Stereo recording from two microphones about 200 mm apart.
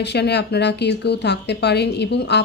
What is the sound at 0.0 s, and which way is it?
A woman's voice, 55° left (ahead or behind).